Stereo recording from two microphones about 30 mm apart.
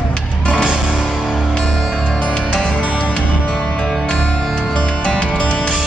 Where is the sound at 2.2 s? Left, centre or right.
Left.